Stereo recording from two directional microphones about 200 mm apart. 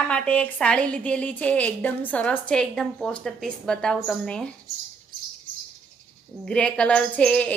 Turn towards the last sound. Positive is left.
turn(degrees=5)  # may be behind; listen again after turning